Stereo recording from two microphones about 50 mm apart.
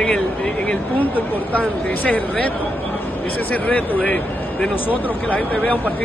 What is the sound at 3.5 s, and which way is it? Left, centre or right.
Speech, left.